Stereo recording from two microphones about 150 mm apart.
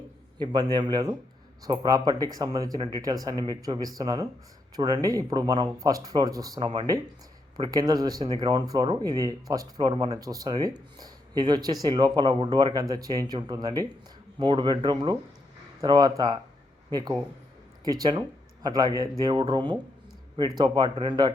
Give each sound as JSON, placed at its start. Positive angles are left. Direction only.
{"t": 0.3, "sound": "speech", "side_deg": -30}